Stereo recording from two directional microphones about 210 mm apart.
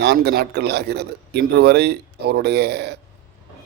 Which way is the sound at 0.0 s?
50° right (ahead or behind).